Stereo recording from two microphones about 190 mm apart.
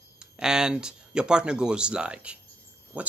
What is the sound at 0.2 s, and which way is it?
Speech, 5° right (ahead or behind).